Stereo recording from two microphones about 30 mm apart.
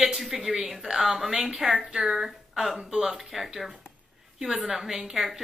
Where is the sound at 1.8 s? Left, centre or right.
Right.